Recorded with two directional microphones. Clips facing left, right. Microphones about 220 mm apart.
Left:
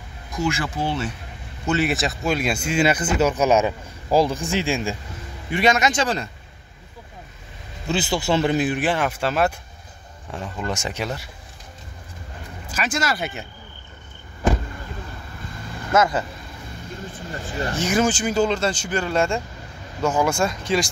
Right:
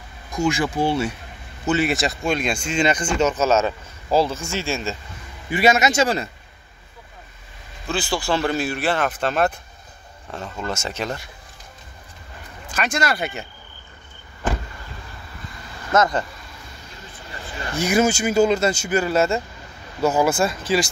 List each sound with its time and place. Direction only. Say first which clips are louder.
0.4 s speech: right 4 dB; 15° right (ahead or behind)
1.7 s speech: right 1 dB; centre (ahead or behind)
5.5 s speech: right 2 dB; 5° right (ahead or behind)
7.9 s speech: left 2 dB; 20° left (ahead or behind)
12.7 s speech: right 1 dB; 5° left (ahead or behind)
15.9 s speech: even; 5° left (ahead or behind)
17.3 s speech: left 6 dB; 45° left (ahead or behind)
17.7 s speech: right 3 dB; 10° right (ahead or behind)